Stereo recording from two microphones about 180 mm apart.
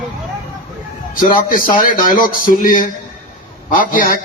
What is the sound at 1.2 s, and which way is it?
A man's voice, 50° left (ahead or behind).